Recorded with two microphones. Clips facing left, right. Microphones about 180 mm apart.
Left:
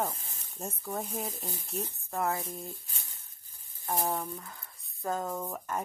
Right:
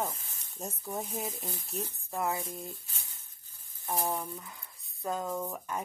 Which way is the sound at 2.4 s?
Centre (ahead or behind).